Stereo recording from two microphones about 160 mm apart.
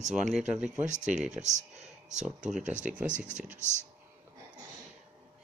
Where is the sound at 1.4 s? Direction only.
45° right (ahead or behind).